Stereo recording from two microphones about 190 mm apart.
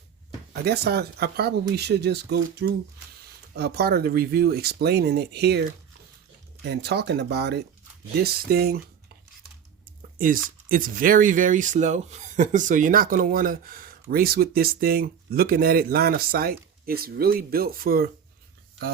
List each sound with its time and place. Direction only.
0.6 s speech: 60° right (ahead or behind)
10.2 s speech: 45° right (ahead or behind)